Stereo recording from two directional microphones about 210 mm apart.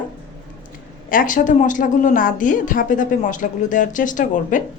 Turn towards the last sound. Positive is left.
turn(degrees=35)  # may be behind; listen again after turning